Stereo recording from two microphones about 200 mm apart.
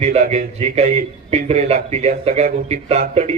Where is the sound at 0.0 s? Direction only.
35° right (ahead or behind).